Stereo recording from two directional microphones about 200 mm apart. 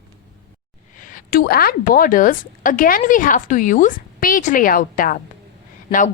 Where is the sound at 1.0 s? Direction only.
45° left (ahead or behind).